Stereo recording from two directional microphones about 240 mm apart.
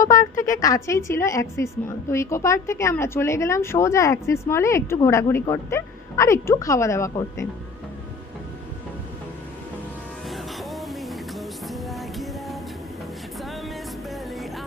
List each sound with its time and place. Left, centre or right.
0.2 s a woman's voice: left
0.6 s a woman's voice: centre
10.2 s music: centre